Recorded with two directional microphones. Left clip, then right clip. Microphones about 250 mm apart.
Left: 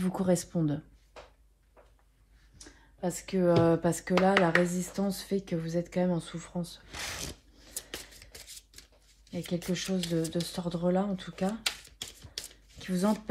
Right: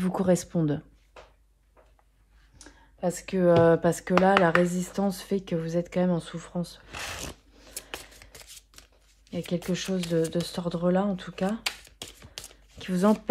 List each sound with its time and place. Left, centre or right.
0.0 s speech: right
3.0 s speech: right
9.3 s speech: right
12.7 s speech: right